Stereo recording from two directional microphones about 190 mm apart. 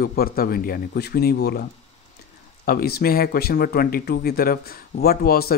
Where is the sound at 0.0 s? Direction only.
50° left (ahead or behind).